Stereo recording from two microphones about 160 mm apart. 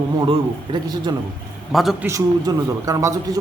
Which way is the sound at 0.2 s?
30° right (ahead or behind).